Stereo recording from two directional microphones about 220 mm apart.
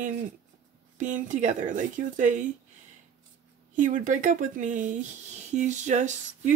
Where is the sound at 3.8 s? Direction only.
35° right (ahead or behind).